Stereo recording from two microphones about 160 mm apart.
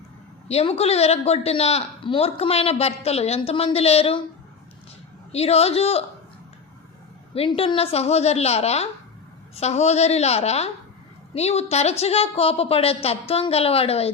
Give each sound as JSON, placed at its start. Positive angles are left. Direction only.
{"t": 0.4, "sound": "speech", "side_deg": 40}
{"t": 5.3, "sound": "speech", "side_deg": 40}
{"t": 7.3, "sound": "a woman's voice", "side_deg": 35}